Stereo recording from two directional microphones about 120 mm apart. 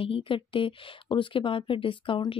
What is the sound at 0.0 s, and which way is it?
Speech, 50° left (ahead or behind).